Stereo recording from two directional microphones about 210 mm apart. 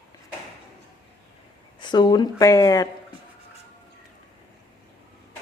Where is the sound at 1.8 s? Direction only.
20° left (ahead or behind).